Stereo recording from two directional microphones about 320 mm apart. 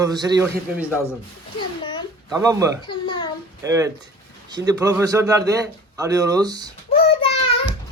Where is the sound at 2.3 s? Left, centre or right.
Centre.